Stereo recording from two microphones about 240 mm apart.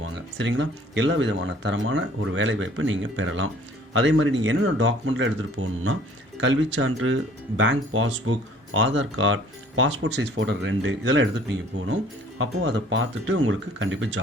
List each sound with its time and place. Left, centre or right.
0.0 s speech: right